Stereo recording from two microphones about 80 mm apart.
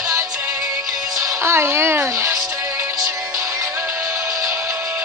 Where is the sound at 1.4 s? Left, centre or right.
Right.